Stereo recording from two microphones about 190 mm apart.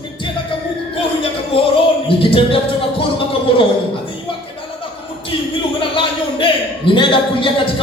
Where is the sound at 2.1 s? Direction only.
30° left (ahead or behind).